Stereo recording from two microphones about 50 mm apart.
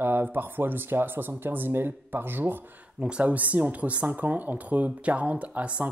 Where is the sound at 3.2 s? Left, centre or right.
Right.